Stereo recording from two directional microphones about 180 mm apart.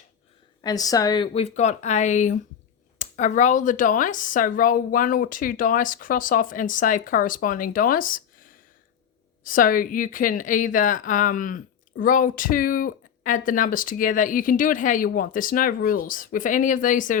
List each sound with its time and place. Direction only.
0.6 s a woman's voice: 20° left (ahead or behind); by 17.2 s 45° left (ahead or behind)